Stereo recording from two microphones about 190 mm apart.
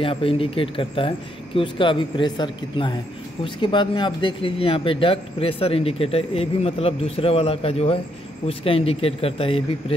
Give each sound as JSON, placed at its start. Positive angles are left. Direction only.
{"t": 0.0, "sound": "speech", "side_deg": 30}